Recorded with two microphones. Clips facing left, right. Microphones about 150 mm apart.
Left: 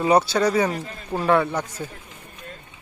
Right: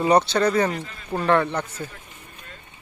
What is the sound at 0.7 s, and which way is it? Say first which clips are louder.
Speech: left 1 dB; 40° left (ahead or behind).